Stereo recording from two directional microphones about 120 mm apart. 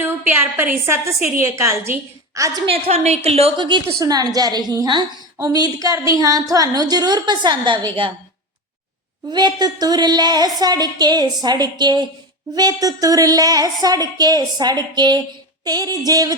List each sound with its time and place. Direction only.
0.0 s a woman's voice: 15° right (ahead or behind)
2.6 s a woman's voice: 55° right (ahead or behind)
3.8 s a woman's voice: 30° right (ahead or behind)
9.3 s a woman's voice: 35° right (ahead or behind)